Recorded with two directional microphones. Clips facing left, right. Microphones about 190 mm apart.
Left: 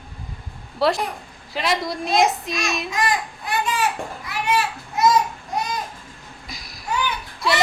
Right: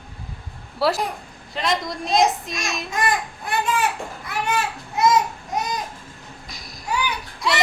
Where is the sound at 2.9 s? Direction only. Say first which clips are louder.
Even; 50° right (ahead or behind).